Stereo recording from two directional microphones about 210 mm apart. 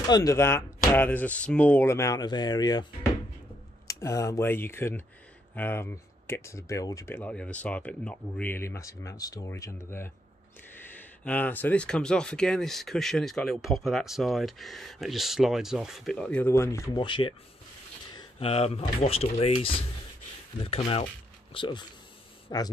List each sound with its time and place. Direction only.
0.1 s speech: 15° left (ahead or behind)